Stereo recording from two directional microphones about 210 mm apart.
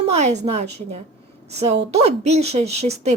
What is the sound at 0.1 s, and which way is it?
A woman's voice, 30° right (ahead or behind).